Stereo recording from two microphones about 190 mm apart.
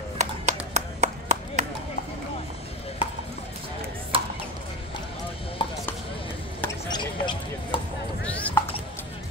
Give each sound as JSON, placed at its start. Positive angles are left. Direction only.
{"t": 0.2, "sound": "clapping", "side_deg": -40}
{"t": 3.0, "sound": "chop", "side_deg": 25}
{"t": 4.1, "sound": "a sound", "side_deg": -30}
{"t": 5.6, "sound": "chopping", "side_deg": 25}
{"t": 6.9, "sound": "basketball bounce", "side_deg": 25}
{"t": 8.2, "sound": "a sound", "side_deg": 5}